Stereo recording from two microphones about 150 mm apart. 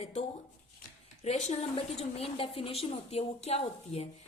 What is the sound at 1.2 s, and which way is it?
A woman's voice, 45° left (ahead or behind).